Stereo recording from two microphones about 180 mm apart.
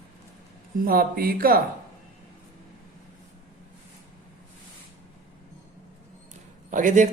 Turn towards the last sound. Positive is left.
turn(degrees=-45)  # may be behind; listen again after turning